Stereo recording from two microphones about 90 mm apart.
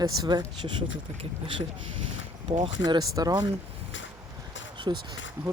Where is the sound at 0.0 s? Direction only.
50° right (ahead or behind).